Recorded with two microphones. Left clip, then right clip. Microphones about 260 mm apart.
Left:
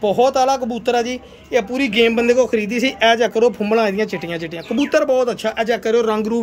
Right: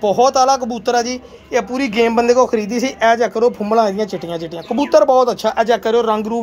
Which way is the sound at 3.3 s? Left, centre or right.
Centre.